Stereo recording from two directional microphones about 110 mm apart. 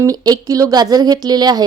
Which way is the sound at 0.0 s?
35° right (ahead or behind).